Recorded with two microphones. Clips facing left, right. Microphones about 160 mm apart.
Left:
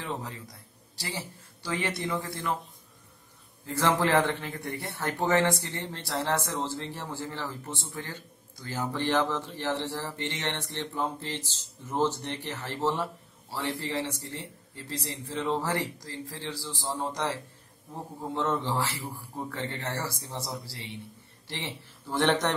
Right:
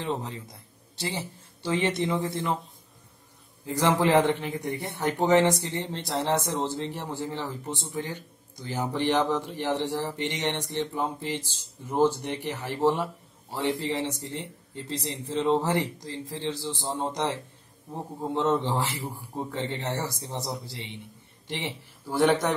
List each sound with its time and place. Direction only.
0.0 s a man's voice: 25° right (ahead or behind)
3.6 s a man's voice: 15° right (ahead or behind)